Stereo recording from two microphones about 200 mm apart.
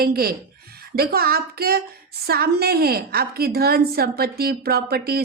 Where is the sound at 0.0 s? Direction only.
50° right (ahead or behind).